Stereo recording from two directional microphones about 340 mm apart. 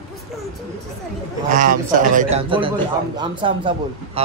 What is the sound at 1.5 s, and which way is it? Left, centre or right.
A man's voice, right.